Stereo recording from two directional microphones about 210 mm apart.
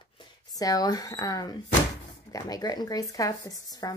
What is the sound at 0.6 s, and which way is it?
Speech, 15° left (ahead or behind).